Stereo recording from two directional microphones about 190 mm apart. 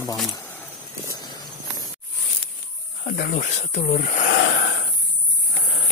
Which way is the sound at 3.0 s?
50° left (ahead or behind).